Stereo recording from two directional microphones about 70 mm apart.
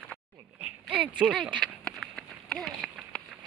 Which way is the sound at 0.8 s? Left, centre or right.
Centre.